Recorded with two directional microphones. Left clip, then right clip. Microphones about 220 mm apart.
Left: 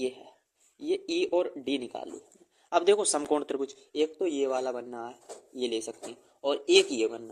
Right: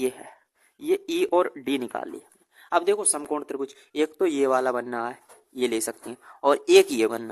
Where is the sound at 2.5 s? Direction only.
25° right (ahead or behind).